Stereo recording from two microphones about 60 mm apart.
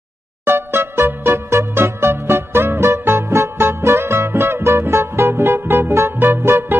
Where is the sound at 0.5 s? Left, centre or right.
Right.